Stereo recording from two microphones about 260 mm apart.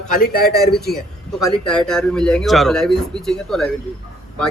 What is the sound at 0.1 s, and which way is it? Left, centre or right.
Speech, left.